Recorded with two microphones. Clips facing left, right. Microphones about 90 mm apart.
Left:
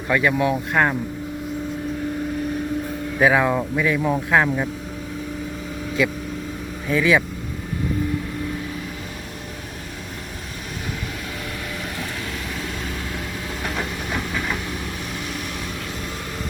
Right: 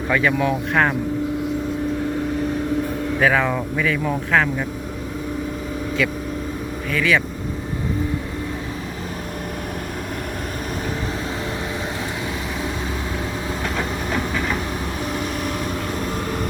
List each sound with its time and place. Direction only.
0.1 s speech: 5° left (ahead or behind)
3.2 s speech: 10° left (ahead or behind)
6.9 s speech: 15° left (ahead or behind)